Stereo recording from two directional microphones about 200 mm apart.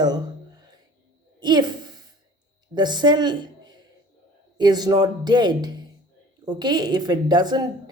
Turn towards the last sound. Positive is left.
turn(degrees=-20)  # may be behind; listen again after turning